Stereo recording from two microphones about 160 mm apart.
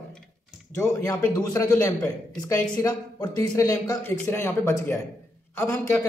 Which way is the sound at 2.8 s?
25° left (ahead or behind).